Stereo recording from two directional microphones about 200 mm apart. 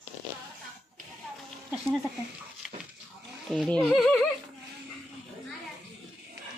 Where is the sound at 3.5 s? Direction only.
5° left (ahead or behind).